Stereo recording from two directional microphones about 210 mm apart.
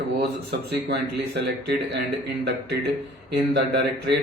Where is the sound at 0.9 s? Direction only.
55° right (ahead or behind).